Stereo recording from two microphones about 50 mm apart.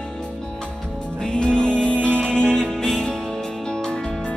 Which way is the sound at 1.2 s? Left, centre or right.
Centre.